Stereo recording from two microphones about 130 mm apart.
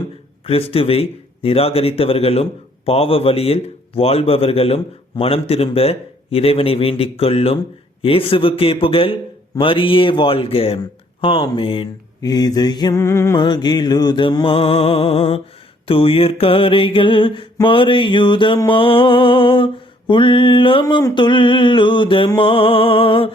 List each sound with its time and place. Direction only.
0.4 s speech: 45° left (ahead or behind)
12.2 s music: 30° left (ahead or behind)
13.0 s music: 20° left (ahead or behind)
13.3 s music: 35° left (ahead or behind)
15.9 s speech: 45° left (ahead or behind)
20.8 s music: 30° left (ahead or behind)
22.4 s speech: 45° left (ahead or behind)